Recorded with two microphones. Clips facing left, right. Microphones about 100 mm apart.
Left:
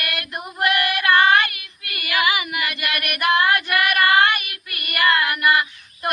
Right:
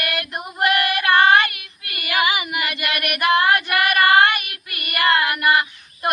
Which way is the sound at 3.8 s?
30° right (ahead or behind).